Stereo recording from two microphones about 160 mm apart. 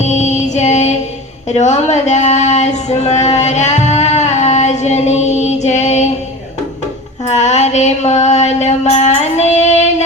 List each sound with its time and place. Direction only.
0.0 s female singing: 45° left (ahead or behind)
1.5 s speech: 45° left (ahead or behind)
7.3 s a sound: 45° left (ahead or behind)